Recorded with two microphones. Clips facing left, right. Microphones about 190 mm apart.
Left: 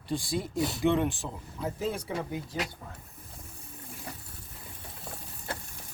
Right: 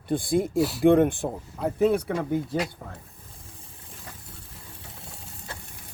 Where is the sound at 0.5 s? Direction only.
5° right (ahead or behind).